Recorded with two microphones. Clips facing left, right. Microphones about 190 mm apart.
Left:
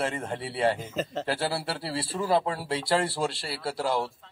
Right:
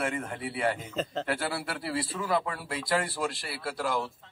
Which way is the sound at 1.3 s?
30° left (ahead or behind).